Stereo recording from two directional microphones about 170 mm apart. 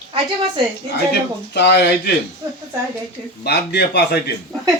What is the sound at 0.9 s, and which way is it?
Speech, 80° left.